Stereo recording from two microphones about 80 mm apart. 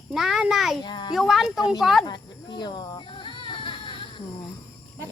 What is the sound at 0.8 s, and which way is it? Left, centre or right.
Speech, left.